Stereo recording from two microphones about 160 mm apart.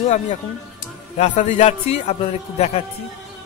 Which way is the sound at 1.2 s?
45° left (ahead or behind).